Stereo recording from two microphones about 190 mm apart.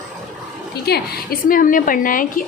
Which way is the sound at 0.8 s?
55° left (ahead or behind).